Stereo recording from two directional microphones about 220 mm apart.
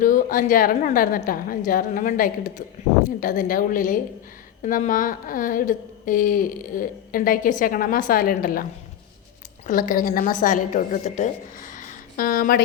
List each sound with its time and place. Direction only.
0.0 s a woman's voice: 40° left (ahead or behind)
9.6 s a woman's voice: 35° left (ahead or behind)